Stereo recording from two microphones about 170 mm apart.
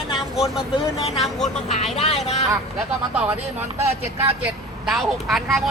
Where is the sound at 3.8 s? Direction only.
15° right (ahead or behind).